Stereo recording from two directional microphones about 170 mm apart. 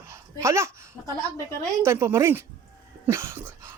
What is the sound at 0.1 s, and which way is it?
A man's voice, 15° right (ahead or behind).